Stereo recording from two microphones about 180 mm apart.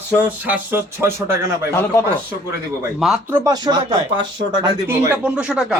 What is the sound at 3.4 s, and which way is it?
Speech, 20° right (ahead or behind).